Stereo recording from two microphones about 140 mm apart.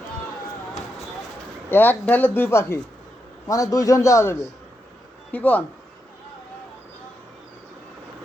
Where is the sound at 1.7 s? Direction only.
15° left (ahead or behind).